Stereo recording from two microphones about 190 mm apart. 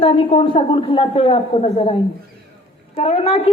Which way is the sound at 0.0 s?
30° left (ahead or behind).